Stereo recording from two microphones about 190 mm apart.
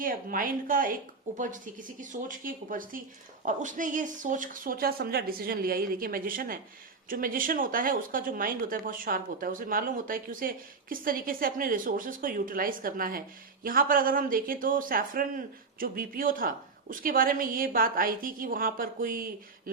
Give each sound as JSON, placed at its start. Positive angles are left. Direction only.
{"t": 0.0, "sound": "speech", "side_deg": -45}